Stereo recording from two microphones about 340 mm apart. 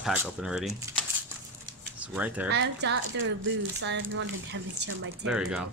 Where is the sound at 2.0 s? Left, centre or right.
Centre.